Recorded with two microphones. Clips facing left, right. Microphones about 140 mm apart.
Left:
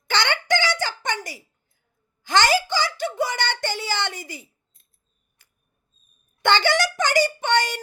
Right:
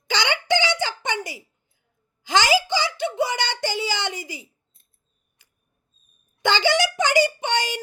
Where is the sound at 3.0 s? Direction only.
20° right (ahead or behind).